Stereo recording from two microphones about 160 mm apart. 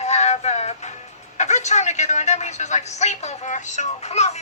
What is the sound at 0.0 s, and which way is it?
Music, 45° left (ahead or behind).